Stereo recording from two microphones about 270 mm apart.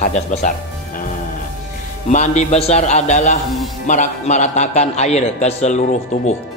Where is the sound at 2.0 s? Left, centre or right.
Left.